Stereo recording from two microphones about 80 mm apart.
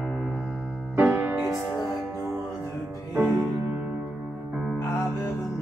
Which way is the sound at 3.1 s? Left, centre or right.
Right.